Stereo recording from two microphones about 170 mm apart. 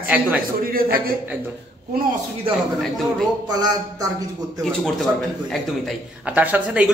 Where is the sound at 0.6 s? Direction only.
55° right (ahead or behind).